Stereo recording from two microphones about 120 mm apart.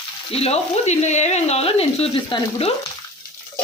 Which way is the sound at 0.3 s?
60° left (ahead or behind).